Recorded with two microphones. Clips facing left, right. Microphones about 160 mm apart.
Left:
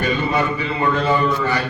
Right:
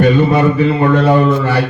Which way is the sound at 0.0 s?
55° right (ahead or behind).